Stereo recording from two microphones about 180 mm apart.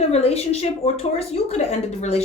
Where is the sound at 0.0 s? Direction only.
35° left (ahead or behind).